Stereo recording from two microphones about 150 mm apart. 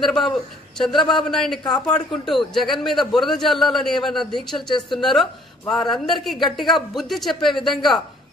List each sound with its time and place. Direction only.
0.0 s a man's voice: centre (ahead or behind)
1.6 s speech: 30° left (ahead or behind)
1.9 s a man's voice: 5° left (ahead or behind)